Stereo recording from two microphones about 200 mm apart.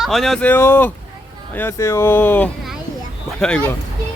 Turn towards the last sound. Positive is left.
turn(degrees=5)  # may be behind; listen again after turning